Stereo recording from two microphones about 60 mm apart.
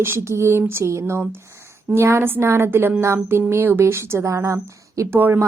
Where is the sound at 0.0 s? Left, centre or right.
Right.